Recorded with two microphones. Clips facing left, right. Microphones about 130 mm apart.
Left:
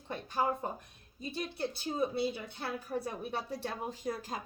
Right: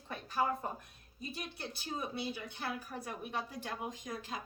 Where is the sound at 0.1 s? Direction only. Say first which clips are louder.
Left 2 dB; 25° left (ahead or behind).